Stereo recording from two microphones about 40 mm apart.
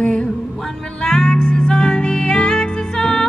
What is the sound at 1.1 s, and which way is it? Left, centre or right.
Music, centre.